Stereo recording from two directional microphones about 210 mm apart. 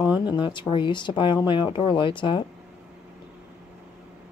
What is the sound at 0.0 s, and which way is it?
Speech, 20° left (ahead or behind).